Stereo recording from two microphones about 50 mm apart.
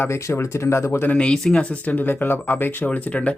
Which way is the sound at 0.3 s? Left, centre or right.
Left.